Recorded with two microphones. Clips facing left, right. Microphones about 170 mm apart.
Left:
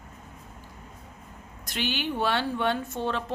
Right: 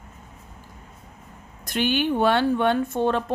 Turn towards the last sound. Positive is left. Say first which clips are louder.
# right 7 dB
turn(degrees=-50)  # may be behind; listen again after turning